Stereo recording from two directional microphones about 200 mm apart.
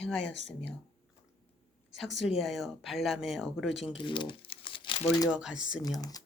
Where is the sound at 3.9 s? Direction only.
25° left (ahead or behind).